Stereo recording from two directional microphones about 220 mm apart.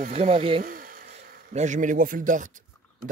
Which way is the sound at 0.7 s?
40° right (ahead or behind).